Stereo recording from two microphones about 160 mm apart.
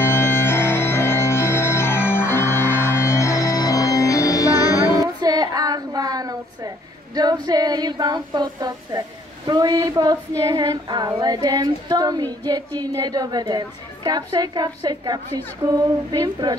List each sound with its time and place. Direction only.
0.0 s music: 15° left (ahead or behind)
4.7 s child singing: 25° right (ahead or behind)
7.4 s female singing: 25° right (ahead or behind)